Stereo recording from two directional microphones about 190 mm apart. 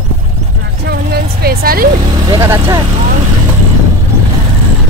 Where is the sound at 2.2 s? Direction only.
15° right (ahead or behind).